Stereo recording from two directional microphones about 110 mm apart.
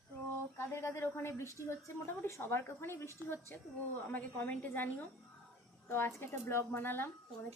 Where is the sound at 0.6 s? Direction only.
25° left (ahead or behind).